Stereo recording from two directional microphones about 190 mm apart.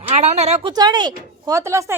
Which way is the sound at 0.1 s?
35° right (ahead or behind).